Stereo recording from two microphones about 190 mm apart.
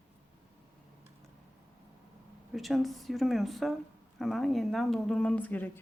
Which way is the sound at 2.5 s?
Centre (ahead or behind).